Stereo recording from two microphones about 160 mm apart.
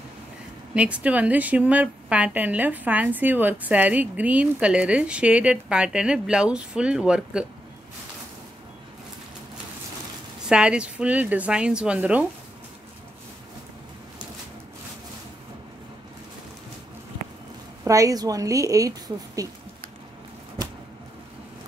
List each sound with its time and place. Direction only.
0.7 s a woman's voice: 10° right (ahead or behind)
10.5 s a woman's voice: 5° right (ahead or behind)
17.8 s a woman's voice: 20° right (ahead or behind)